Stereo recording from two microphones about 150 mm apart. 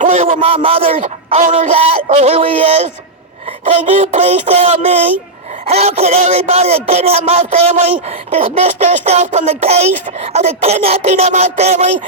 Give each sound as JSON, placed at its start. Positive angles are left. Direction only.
{"t": 0.0, "sound": "a sound", "side_deg": -50}
{"t": 0.3, "sound": "a man's voice", "side_deg": -40}
{"t": 1.7, "sound": "a man's voice", "side_deg": -40}